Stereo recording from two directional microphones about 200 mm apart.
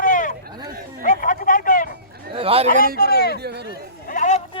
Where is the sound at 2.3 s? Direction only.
30° right (ahead or behind).